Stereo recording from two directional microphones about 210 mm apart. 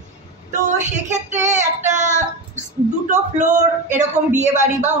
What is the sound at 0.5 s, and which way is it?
Female singing, 35° right (ahead or behind).